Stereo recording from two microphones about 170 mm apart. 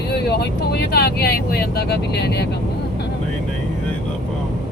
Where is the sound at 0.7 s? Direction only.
65° left (ahead or behind).